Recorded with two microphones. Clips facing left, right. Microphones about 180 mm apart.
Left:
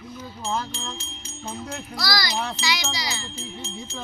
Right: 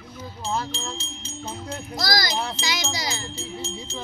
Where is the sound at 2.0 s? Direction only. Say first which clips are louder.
Right 2 dB; 45° right (ahead or behind).